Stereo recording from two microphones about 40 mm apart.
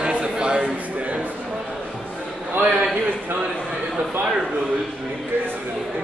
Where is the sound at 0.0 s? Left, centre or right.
Right.